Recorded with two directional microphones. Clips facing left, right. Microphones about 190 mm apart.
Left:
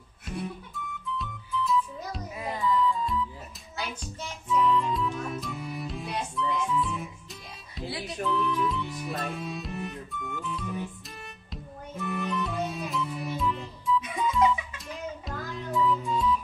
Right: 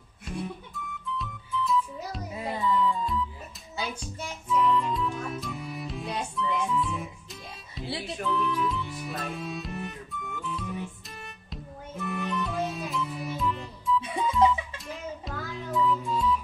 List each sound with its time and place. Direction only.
0.7 s music: centre (ahead or behind)
2.3 s music: 25° right (ahead or behind)
2.6 s music: centre (ahead or behind)
14.0 s music: 30° right (ahead or behind)
14.9 s music: centre (ahead or behind)